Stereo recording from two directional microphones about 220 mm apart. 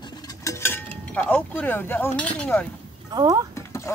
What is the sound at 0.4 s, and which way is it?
Cutlery, 10° left (ahead or behind).